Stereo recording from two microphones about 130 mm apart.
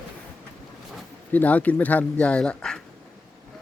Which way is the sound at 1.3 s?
10° left (ahead or behind).